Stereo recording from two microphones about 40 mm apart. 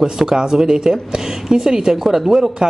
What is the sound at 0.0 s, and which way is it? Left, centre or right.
Speech, centre.